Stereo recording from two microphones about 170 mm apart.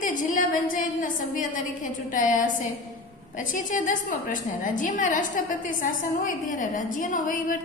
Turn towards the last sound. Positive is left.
turn(degrees=55)  # may be behind; listen again after turning